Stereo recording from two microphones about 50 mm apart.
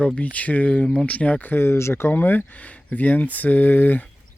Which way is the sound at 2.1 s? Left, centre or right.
Left.